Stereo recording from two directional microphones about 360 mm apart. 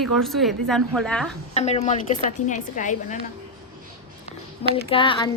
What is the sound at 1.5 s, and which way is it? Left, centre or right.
A woman's voice, centre.